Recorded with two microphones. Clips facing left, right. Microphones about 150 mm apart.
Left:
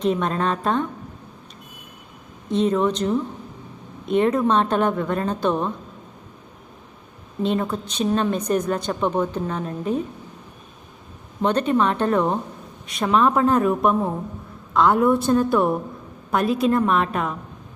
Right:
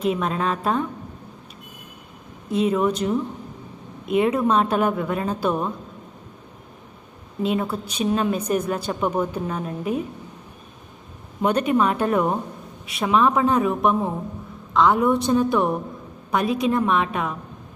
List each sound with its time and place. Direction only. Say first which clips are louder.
0.0 s speech: left 1 dB; 5° right (ahead or behind)
2.5 s a woman's voice: left 1 dB; 5° right (ahead or behind)
7.4 s a woman's voice: left 1 dB; 5° right (ahead or behind)
11.4 s a woman's voice: even; 10° right (ahead or behind)